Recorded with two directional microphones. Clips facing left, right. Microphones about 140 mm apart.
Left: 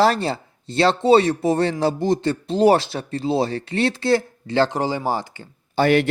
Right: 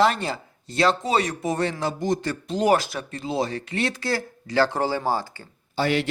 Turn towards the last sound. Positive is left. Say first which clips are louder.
# left 6 dB
turn(degrees=55)  # may be behind; listen again after turning